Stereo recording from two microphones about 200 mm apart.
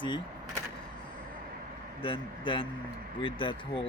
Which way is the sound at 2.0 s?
25° left (ahead or behind).